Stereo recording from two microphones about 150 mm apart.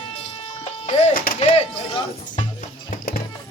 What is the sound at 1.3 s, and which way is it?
Music, 40° left (ahead or behind).